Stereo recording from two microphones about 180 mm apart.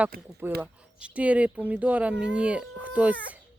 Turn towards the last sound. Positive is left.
turn(degrees=-10)  # may be behind; listen again after turning